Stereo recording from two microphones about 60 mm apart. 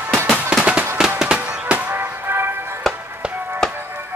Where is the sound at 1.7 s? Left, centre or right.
Right.